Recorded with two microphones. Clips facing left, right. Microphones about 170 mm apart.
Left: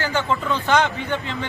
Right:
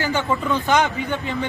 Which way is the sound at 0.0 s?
15° right (ahead or behind).